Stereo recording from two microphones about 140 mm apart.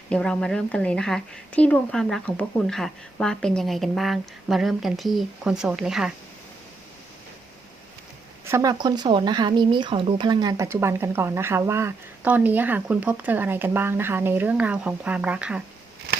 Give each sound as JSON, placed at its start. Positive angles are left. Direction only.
{"t": 0.1, "sound": "a woman's voice", "side_deg": 5}
{"t": 8.4, "sound": "speech", "side_deg": -20}
{"t": 8.8, "sound": "speech", "side_deg": -30}
{"t": 10.6, "sound": "a woman's voice", "side_deg": -20}